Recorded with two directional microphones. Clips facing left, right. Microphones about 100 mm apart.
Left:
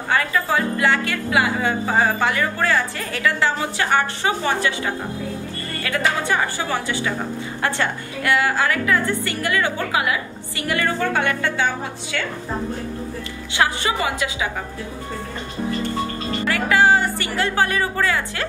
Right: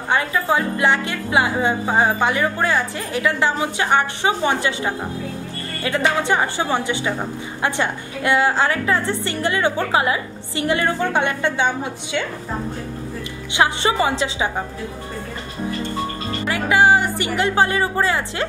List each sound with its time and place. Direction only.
0.1 s speech: 20° right (ahead or behind)
13.5 s speech: 25° right (ahead or behind)
16.4 s speech: 20° right (ahead or behind)